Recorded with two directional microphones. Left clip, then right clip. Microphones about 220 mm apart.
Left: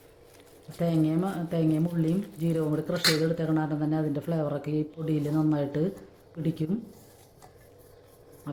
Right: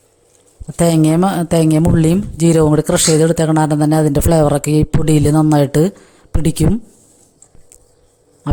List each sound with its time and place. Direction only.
0.8 s speech: 50° right (ahead or behind)